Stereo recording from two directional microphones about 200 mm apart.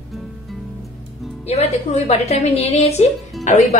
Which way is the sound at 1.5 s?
30° left (ahead or behind).